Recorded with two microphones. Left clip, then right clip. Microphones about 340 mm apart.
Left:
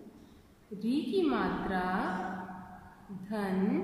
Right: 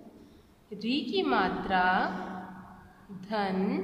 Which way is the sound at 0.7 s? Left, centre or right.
Right.